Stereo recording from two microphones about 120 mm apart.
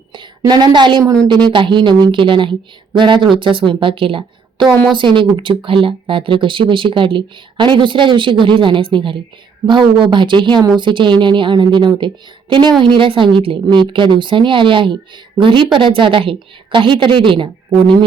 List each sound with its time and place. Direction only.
0.1 s a woman's voice: 40° right (ahead or behind)